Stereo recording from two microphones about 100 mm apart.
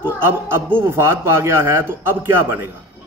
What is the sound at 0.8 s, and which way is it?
Speech, 25° right (ahead or behind).